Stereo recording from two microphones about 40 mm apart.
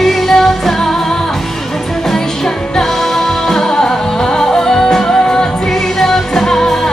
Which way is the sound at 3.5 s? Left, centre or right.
Centre.